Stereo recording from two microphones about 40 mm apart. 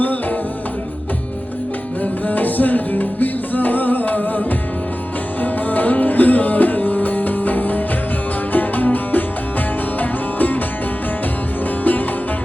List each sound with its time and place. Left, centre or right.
0.0 s music: left
2.2 s music: left
11.8 s music: left